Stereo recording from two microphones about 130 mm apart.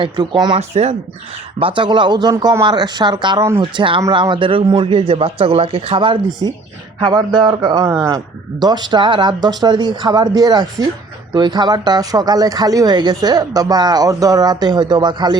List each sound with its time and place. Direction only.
0.0 s speech: 35° right (ahead or behind)
0.6 s speech: 55° right (ahead or behind)
1.5 s a man's voice: 40° right (ahead or behind)